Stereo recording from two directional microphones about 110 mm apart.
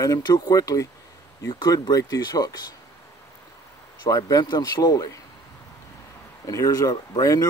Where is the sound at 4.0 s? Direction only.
30° left (ahead or behind).